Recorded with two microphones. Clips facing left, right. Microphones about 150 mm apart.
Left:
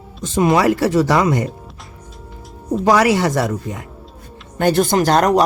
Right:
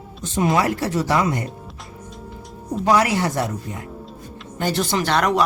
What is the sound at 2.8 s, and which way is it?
Speech, 90° left.